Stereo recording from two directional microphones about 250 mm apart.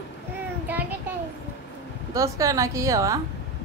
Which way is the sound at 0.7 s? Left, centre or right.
Centre.